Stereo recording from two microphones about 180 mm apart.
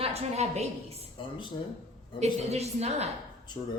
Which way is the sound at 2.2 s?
35° right (ahead or behind).